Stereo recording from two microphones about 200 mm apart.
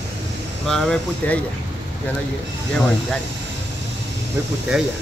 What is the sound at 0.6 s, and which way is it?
Speech, 5° left (ahead or behind).